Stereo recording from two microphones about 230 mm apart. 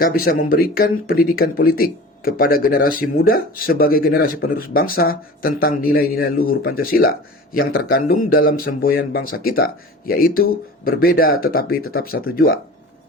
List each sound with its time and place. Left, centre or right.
0.0 s speech: left